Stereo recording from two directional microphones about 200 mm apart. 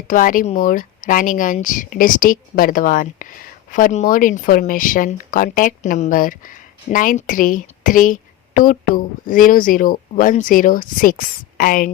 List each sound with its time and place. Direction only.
0.1 s speech: 40° left (ahead or behind)